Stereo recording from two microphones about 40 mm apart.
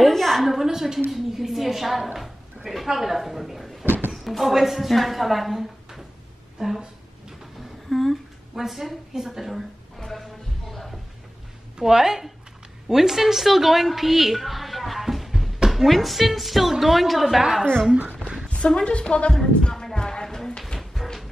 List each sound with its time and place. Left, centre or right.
0.0 s a sound: centre
0.5 s a woman's voice: centre
7.9 s a woman's voice: centre
10.1 s a sound: centre
11.8 s a woman's voice: centre
17.4 s a woman's voice: centre
18.7 s a woman's voice: left
19.3 s music: centre
20.9 s music: centre